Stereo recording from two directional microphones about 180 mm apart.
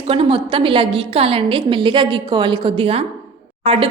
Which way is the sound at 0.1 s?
30° right (ahead or behind).